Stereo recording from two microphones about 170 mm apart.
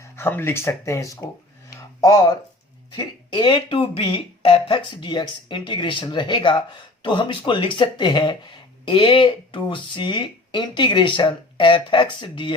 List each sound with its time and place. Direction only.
0.0 s speech: 15° left (ahead or behind)
1.7 s a sound: 20° left (ahead or behind)
2.9 s speech: 30° left (ahead or behind)